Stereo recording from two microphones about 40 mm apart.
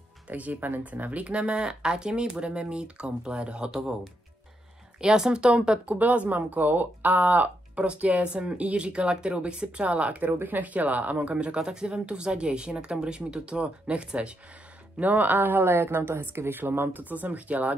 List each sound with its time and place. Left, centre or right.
0.3 s speech: right
1.2 s speech: right
5.0 s speech: centre
5.9 s speech: right
9.8 s speech: right
11.3 s speech: right
15.0 s speech: right
15.6 s speech: right
16.9 s speech: right